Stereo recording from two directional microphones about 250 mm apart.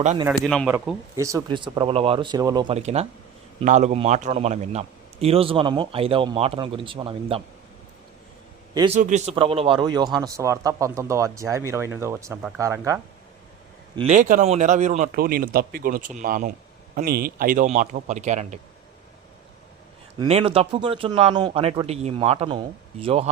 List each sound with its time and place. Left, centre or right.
0.0 s a man's voice: right
0.3 s speech: centre
0.7 s a man's voice: centre
8.7 s a man's voice: centre
9.0 s speech: right; by 13.0 s centre
13.9 s a man's voice: right
20.1 s a man's voice: right